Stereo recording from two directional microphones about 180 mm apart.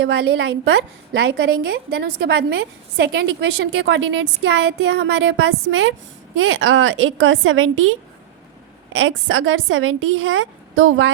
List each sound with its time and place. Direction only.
0.0 s a woman's voice: 70° right (ahead or behind); by 11.1 s 90° right